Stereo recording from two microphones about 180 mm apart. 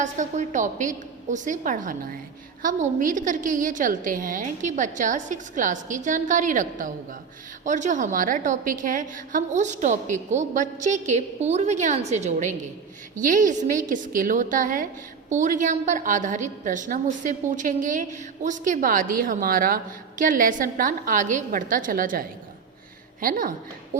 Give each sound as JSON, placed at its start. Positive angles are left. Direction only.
{"t": 0.0, "sound": "a woman's voice", "side_deg": -45}